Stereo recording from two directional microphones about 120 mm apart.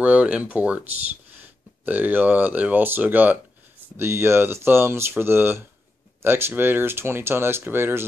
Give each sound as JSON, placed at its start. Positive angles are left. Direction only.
{"t": 0.0, "sound": "speech", "side_deg": -10}